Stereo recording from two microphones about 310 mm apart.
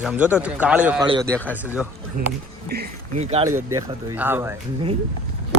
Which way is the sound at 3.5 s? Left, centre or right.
Centre.